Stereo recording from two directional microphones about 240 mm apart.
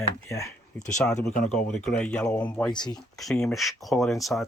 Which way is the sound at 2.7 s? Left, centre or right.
Centre.